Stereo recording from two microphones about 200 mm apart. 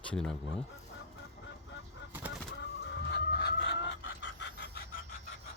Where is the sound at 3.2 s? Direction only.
50° left (ahead or behind).